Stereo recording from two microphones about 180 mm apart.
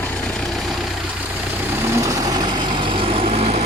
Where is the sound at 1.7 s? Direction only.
15° right (ahead or behind); by 3.6 s 35° right (ahead or behind).